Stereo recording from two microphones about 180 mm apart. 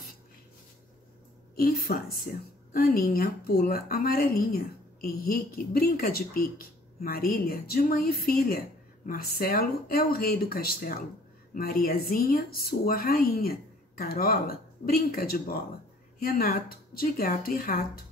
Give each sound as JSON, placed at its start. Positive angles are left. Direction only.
{"t": 1.5, "sound": "a woman's voice", "side_deg": 55}